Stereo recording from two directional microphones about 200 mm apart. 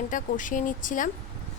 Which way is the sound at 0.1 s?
40° left (ahead or behind).